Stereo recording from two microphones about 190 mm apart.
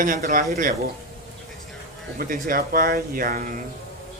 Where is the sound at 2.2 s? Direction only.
50° right (ahead or behind).